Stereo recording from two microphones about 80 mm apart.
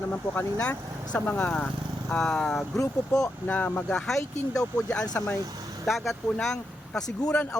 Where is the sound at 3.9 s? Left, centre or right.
Centre.